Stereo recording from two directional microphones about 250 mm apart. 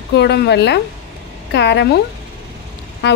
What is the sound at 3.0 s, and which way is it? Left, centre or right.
Vehicle, left.